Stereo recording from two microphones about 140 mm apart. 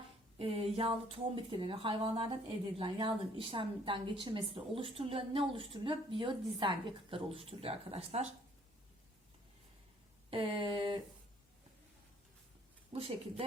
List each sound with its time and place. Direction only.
0.3 s speech: 45° right (ahead or behind)
10.2 s speech: 40° right (ahead or behind)
12.9 s a woman's voice: 45° right (ahead or behind)